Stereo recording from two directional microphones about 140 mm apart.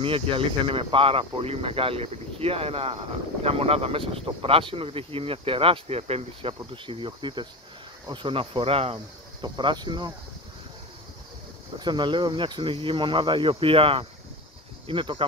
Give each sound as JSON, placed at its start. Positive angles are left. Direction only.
{"t": 0.0, "sound": "speech", "side_deg": -40}
{"t": 11.8, "sound": "speech", "side_deg": -35}